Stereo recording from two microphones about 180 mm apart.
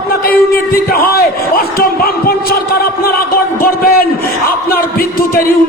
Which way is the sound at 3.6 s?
55° left (ahead or behind).